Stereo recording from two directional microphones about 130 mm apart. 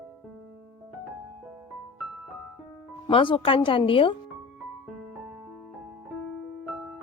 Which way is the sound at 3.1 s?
40° left (ahead or behind).